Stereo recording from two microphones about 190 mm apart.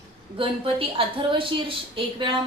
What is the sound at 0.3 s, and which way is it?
A woman's voice, 30° right (ahead or behind).